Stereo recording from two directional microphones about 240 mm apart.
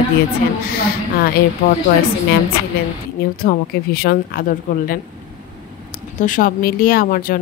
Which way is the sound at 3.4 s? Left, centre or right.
Left.